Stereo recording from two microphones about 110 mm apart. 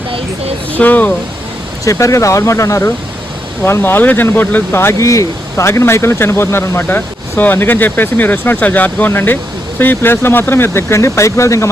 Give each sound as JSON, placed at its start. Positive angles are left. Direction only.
{"t": 0.1, "sound": "speech", "side_deg": -60}
{"t": 0.8, "sound": "speech", "side_deg": 15}
{"t": 1.8, "sound": "speech", "side_deg": 30}